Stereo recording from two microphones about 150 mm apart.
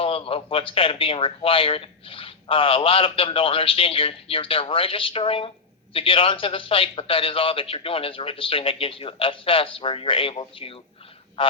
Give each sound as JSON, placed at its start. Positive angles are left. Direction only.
{"t": 0.0, "sound": "speech", "side_deg": 40}